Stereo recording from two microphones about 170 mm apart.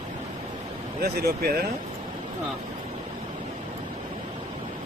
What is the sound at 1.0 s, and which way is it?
Speech, 65° right (ahead or behind).